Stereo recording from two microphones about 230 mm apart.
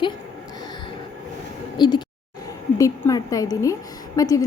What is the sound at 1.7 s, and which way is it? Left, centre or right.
A woman's voice, centre.